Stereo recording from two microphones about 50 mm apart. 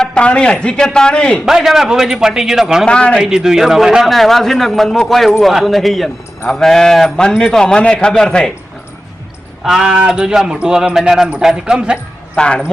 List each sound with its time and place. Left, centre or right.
0.0 s a man's voice: centre
1.5 s a man's voice: centre
2.8 s speech: centre
3.2 s a man's voice: centre
4.0 s a man's voice: centre
9.6 s a man's voice: centre
12.4 s speech: centre